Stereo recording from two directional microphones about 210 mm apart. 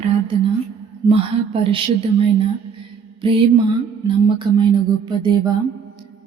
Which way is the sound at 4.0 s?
20° right (ahead or behind).